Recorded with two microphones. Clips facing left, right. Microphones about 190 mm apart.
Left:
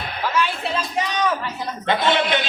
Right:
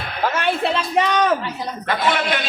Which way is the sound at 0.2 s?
55° right (ahead or behind).